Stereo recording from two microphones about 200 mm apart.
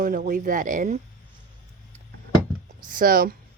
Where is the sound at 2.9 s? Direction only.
45° right (ahead or behind).